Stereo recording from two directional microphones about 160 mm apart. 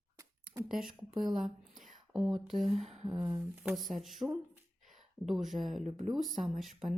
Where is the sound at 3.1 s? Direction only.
20° right (ahead or behind).